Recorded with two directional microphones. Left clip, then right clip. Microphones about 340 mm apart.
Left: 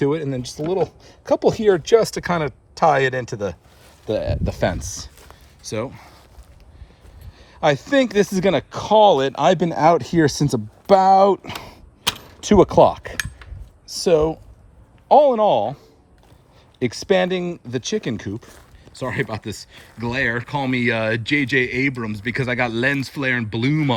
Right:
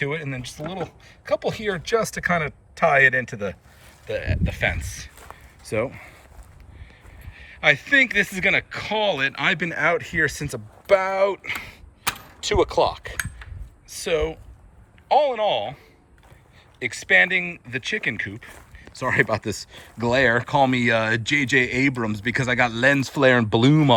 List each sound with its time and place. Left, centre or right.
0.0 s speech: centre
7.6 s speech: centre
13.8 s speech: centre
16.9 s speech: centre